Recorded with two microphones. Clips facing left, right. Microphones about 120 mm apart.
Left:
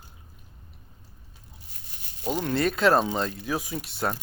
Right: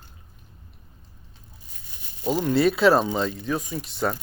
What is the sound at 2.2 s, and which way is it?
Speech, 5° right (ahead or behind).